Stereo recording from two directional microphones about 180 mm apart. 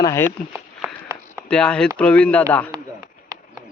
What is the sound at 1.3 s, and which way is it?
Speech, 5° left (ahead or behind).